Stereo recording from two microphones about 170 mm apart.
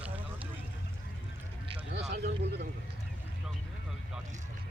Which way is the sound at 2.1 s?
75° right (ahead or behind).